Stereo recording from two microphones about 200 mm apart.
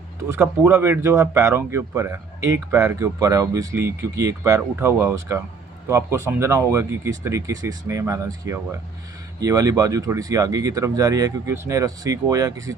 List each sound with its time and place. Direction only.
0.3 s speech: 15° right (ahead or behind)